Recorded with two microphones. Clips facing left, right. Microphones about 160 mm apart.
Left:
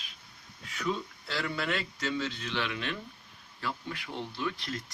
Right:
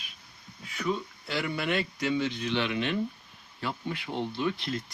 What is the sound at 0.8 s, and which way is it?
Speech, 15° right (ahead or behind).